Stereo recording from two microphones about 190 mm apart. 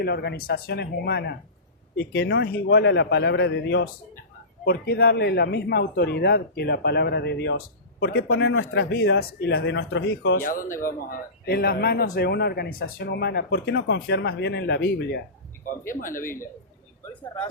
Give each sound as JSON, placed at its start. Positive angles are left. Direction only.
{"t": 0.0, "sound": "speech", "side_deg": 60}
{"t": 4.6, "sound": "speech", "side_deg": 55}
{"t": 10.4, "sound": "speech", "side_deg": 45}
{"t": 15.9, "sound": "speech", "side_deg": 45}